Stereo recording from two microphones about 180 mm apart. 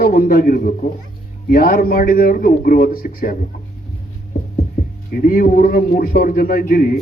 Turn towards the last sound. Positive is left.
turn(degrees=50)  # may be behind; listen again after turning